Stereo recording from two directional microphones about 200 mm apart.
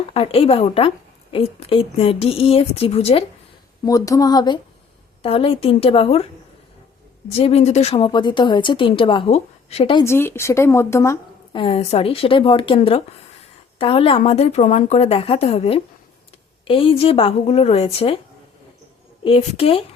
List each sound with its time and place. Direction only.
0.1 s a woman's voice: 30° left (ahead or behind)
3.8 s a woman's voice: 15° left (ahead or behind)
7.3 s a woman's voice: 30° left (ahead or behind)
10.0 s speech: 10° left (ahead or behind)
11.5 s a woman's voice: 30° left (ahead or behind)
19.2 s a woman's voice: 30° left (ahead or behind)